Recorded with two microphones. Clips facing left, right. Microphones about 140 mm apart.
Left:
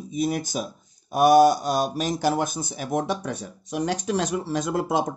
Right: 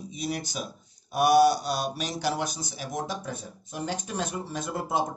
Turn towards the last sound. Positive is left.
turn(degrees=90)